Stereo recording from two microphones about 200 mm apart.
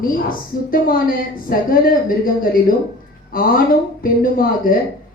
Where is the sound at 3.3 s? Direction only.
45° left (ahead or behind).